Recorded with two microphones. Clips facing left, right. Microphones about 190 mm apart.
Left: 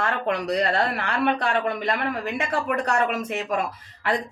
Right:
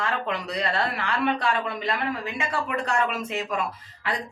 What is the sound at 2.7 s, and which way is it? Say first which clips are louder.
Speech: left 4 dB; 40° left (ahead or behind).